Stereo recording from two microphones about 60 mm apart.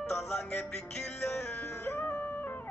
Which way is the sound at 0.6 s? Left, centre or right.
Centre.